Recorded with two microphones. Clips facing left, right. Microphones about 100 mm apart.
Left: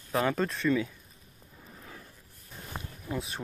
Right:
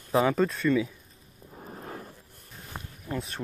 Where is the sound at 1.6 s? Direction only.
50° right (ahead or behind).